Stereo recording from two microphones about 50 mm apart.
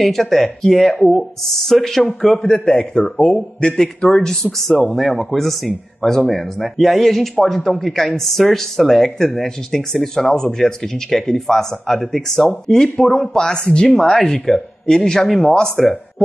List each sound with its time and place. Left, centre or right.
0.0 s speech: centre
2.5 s a man's voice: centre